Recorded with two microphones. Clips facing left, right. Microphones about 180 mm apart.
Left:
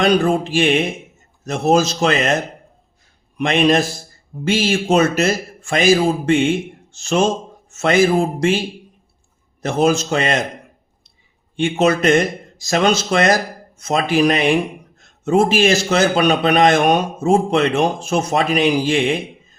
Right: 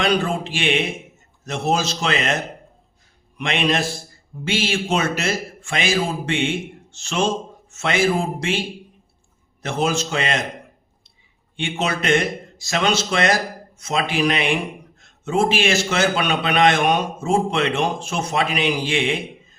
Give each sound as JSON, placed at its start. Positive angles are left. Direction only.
{"t": 0.0, "sound": "a man's voice", "side_deg": 45}
{"t": 11.5, "sound": "a man's voice", "side_deg": 45}